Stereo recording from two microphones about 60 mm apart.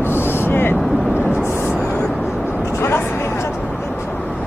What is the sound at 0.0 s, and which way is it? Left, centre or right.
Vehicle, left.